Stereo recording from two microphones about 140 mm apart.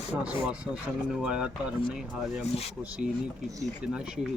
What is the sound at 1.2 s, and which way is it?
Speech, 5° right (ahead or behind).